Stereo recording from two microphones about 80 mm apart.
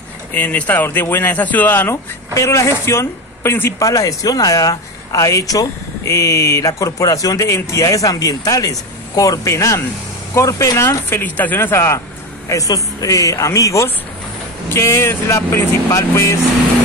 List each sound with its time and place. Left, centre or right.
0.3 s speech: left
3.8 s speech: left